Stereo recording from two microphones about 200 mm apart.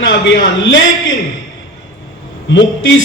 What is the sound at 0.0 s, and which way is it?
A man's voice, 65° left (ahead or behind).